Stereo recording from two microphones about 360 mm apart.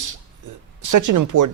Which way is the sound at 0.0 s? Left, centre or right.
Right.